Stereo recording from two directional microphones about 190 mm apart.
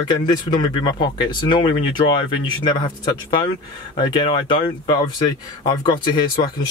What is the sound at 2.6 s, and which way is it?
Speech, 25° left (ahead or behind).